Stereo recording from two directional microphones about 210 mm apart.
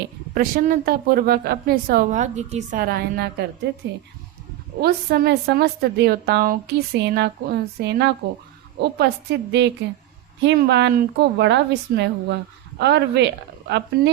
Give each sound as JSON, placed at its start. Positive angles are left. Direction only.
{"t": 0.3, "sound": "a woman's voice", "side_deg": -40}